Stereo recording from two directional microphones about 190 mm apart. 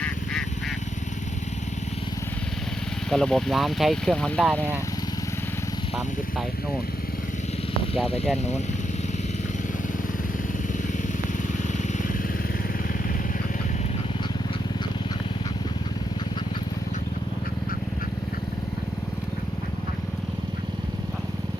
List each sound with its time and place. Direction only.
3.1 s speech: 5° left (ahead or behind)
8.0 s speech: 30° left (ahead or behind)